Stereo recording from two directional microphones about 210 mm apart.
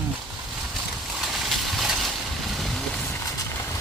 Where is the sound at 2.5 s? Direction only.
Centre (ahead or behind).